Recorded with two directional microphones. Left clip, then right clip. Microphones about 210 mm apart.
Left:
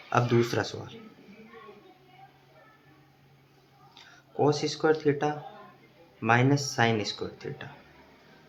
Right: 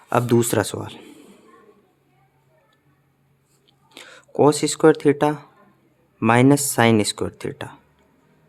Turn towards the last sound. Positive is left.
turn(degrees=-60)  # may be behind; listen again after turning